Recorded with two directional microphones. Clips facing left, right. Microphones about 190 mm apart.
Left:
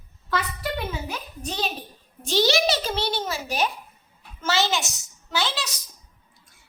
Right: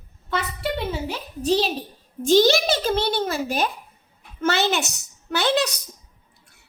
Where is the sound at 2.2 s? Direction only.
50° right (ahead or behind).